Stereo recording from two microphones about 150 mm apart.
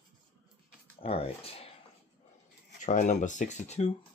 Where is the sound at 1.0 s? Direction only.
40° left (ahead or behind).